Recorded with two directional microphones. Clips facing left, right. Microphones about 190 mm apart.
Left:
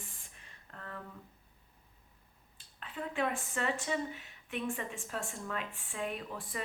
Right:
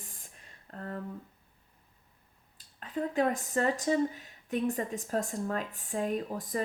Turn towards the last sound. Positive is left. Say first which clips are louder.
# right 8 dB
turn(degrees=-40)  # may be behind; listen again after turning